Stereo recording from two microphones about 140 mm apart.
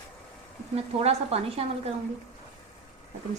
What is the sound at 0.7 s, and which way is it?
Speech, 45° right (ahead or behind).